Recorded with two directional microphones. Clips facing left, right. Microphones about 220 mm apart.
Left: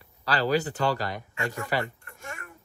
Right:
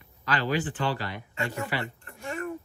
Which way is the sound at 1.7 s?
45° left (ahead or behind).